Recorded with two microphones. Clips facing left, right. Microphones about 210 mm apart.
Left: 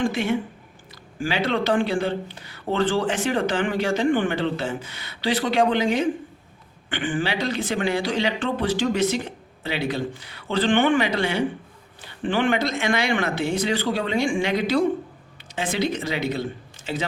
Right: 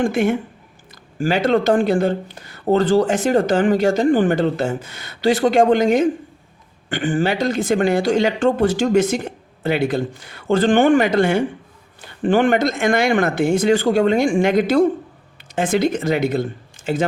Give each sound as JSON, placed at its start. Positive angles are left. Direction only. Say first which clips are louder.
{"t": 0.0, "sound": "speech", "louder": "right 5 dB", "side_deg": -50}